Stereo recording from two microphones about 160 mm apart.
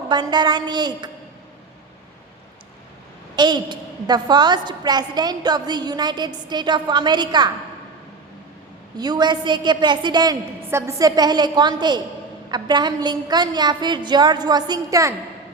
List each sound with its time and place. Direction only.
0.1 s a woman's voice: 25° right (ahead or behind)
3.3 s a woman's voice: 25° right (ahead or behind)
9.0 s a woman's voice: 25° right (ahead or behind)